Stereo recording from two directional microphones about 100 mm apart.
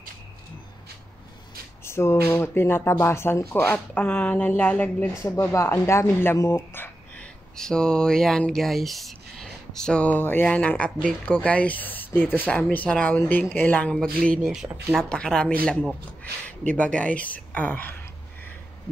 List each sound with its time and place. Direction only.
1.9 s speech: 25° left (ahead or behind)
5.1 s speech: 30° left (ahead or behind)
6.3 s a sound: 30° left (ahead or behind)
7.5 s speech: 5° left (ahead or behind)
14.4 s speech: 5° right (ahead or behind)
15.0 s speech: 5° left (ahead or behind)